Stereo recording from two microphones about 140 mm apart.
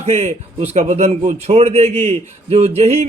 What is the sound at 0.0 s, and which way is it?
A man's voice, 50° right (ahead or behind).